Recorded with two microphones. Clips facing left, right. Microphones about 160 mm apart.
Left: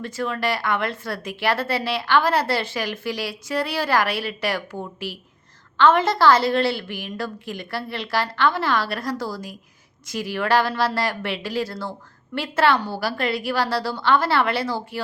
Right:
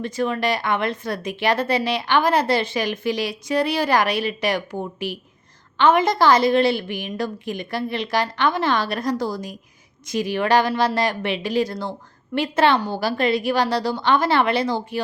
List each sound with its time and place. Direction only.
0.0 s a woman's voice: 20° right (ahead or behind)